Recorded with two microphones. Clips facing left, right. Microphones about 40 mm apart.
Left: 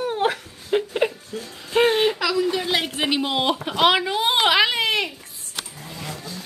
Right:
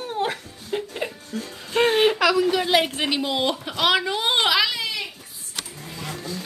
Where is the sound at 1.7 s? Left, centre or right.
Left.